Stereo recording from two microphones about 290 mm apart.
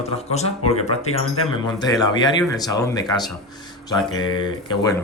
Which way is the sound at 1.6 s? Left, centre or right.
Centre.